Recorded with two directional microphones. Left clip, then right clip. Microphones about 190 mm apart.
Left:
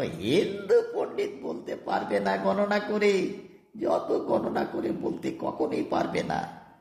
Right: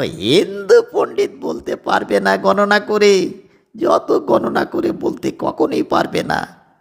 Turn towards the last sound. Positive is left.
turn(degrees=-35)  # may be behind; listen again after turning